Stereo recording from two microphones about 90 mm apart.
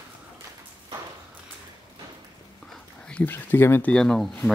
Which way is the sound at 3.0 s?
15° left (ahead or behind).